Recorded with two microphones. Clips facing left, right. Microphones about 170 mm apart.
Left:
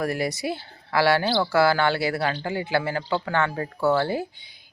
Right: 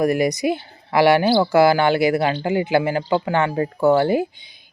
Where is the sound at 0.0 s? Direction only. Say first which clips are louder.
Right 8 dB; 15° right (ahead or behind).